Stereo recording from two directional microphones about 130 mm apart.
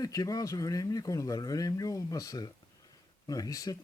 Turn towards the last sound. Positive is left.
turn(degrees=25)  # may be behind; listen again after turning